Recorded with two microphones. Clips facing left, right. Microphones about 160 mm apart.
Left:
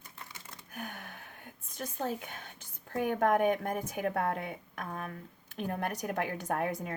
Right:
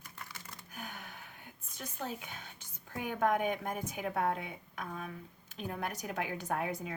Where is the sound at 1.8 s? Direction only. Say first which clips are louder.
Left 5 dB; 50° left (ahead or behind).